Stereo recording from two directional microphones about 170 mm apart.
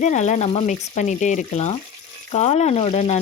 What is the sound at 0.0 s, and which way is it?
Frying, 45° left (ahead or behind).